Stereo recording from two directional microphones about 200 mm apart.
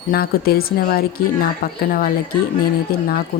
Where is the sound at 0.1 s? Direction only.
50° left (ahead or behind).